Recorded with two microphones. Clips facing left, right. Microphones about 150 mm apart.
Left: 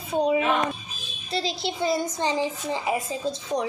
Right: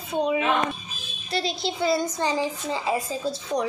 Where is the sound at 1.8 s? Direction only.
20° left (ahead or behind).